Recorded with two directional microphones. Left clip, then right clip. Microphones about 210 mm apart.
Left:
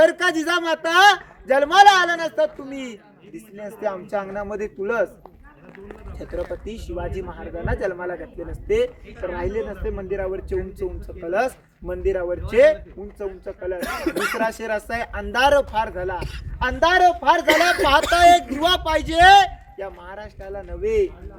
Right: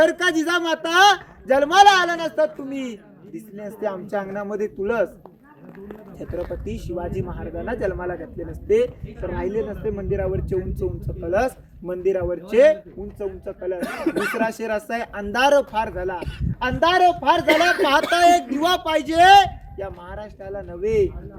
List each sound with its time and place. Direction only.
0.0 s a man's voice: centre (ahead or behind)
13.7 s speech: 40° left (ahead or behind)
14.3 s a man's voice: centre (ahead or behind)